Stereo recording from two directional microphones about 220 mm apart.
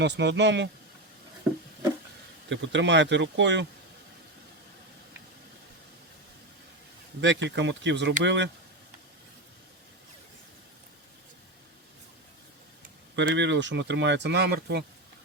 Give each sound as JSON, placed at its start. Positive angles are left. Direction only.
{"t": 0.0, "sound": "speech", "side_deg": -50}
{"t": 2.5, "sound": "speech", "side_deg": -55}
{"t": 7.2, "sound": "speech", "side_deg": -55}
{"t": 13.1, "sound": "speech", "side_deg": -55}